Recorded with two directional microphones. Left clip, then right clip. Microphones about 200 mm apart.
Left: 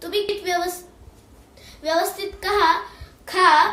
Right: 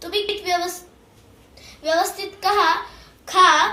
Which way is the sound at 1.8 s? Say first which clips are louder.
Right 1 dB; 15° left (ahead or behind).